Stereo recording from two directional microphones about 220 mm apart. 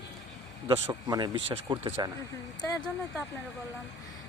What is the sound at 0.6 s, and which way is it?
Speech, 15° right (ahead or behind).